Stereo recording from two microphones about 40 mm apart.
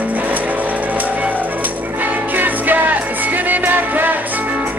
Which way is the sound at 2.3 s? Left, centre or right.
Right.